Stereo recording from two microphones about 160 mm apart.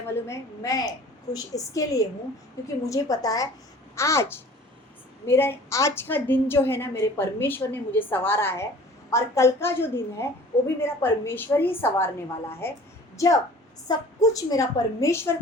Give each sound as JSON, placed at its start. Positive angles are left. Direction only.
{"t": 0.1, "sound": "a woman's voice", "side_deg": 15}